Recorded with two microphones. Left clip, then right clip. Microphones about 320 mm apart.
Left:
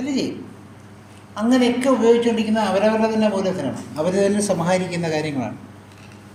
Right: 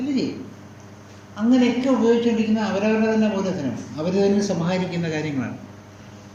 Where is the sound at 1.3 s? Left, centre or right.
Left.